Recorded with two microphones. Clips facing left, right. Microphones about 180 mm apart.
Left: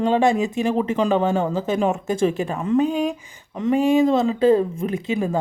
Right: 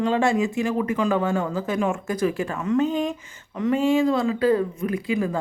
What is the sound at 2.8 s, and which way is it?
Speech, 10° left (ahead or behind).